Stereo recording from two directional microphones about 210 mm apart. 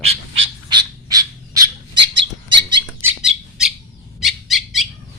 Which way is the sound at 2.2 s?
20° right (ahead or behind).